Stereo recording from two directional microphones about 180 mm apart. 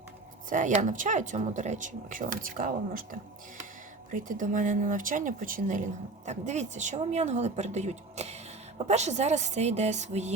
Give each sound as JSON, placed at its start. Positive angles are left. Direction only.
{"t": 0.5, "sound": "speech", "side_deg": -45}